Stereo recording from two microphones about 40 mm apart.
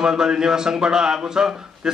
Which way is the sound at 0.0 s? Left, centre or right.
Centre.